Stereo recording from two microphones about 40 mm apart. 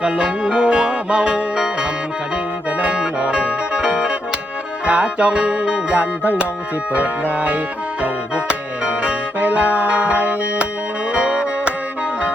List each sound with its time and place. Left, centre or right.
0.1 s music: right
9.4 s music: right